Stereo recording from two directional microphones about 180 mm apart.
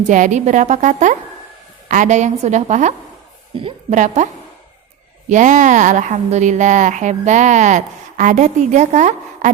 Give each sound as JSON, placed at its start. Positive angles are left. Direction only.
{"t": 0.1, "sound": "a woman's voice", "side_deg": -45}
{"t": 3.6, "sound": "a woman's voice", "side_deg": -30}
{"t": 3.9, "sound": "a woman's voice", "side_deg": -45}
{"t": 5.3, "sound": "a woman's voice", "side_deg": -45}